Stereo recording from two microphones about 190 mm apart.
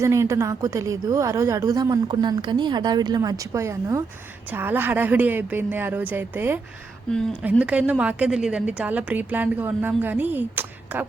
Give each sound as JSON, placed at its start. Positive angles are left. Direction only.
{"t": 0.0, "sound": "a woman's voice", "side_deg": -15}
{"t": 7.6, "sound": "a woman's voice", "side_deg": -5}